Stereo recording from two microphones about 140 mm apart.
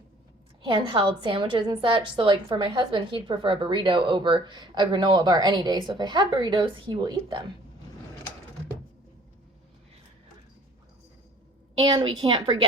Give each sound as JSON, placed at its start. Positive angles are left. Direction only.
{"t": 0.6, "sound": "a woman's voice", "side_deg": -35}
{"t": 12.0, "sound": "a woman's voice", "side_deg": -35}